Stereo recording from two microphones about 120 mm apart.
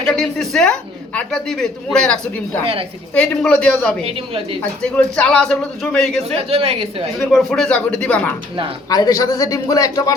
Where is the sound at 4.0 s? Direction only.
50° right (ahead or behind).